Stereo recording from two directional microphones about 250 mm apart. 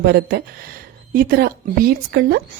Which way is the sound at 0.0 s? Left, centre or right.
Right.